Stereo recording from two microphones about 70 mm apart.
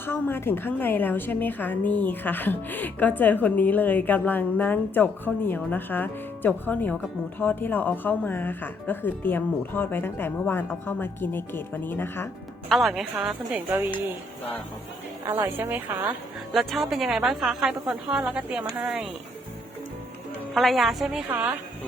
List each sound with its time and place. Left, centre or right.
0.0 s a woman's voice: left
12.6 s a woman's voice: centre
13.5 s speech: right
15.3 s speech: right
16.5 s a woman's voice: centre
20.6 s a woman's voice: centre
21.2 s speech: right